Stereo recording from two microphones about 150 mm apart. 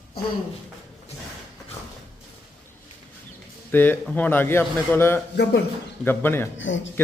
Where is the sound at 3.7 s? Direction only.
10° left (ahead or behind).